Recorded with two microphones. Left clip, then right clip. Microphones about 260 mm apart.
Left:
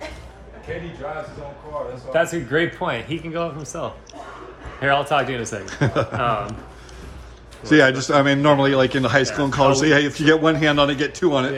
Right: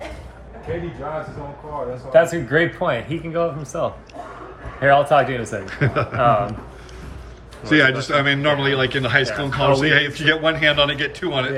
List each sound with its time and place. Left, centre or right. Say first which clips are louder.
2.1 s a man's voice: right 4 dB; centre
6.1 s a man's voice: right 5 dB; centre
7.6 s a man's voice: left 1 dB; centre